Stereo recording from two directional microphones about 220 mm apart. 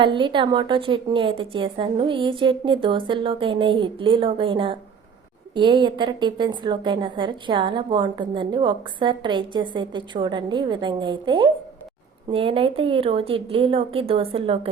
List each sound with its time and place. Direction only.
0.0 s a woman's voice: 20° right (ahead or behind)